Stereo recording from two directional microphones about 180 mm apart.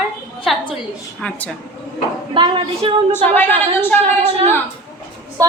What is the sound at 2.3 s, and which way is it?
Speech, 30° right (ahead or behind).